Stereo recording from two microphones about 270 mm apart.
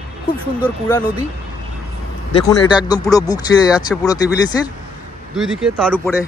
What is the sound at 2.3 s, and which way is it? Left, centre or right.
Speech, centre.